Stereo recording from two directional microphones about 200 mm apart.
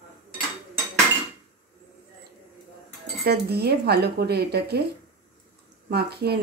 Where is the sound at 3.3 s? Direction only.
55° right (ahead or behind).